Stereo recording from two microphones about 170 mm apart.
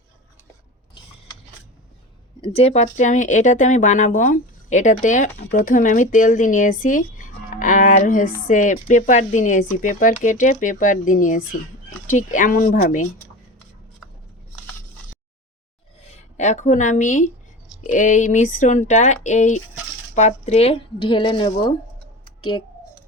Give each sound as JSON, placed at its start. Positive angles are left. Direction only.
{"t": 2.4, "sound": "speech", "side_deg": 35}
{"t": 16.0, "sound": "a child's voice", "side_deg": 40}